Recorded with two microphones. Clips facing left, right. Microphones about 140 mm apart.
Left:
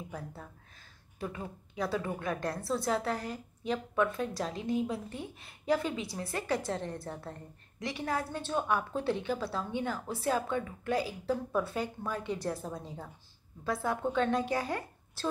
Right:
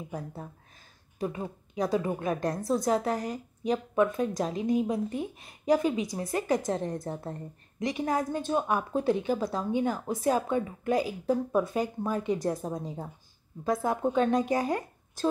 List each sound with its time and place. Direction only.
0.1 s a woman's voice: 25° right (ahead or behind)